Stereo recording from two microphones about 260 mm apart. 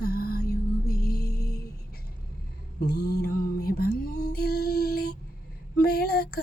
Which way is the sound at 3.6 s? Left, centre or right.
Left.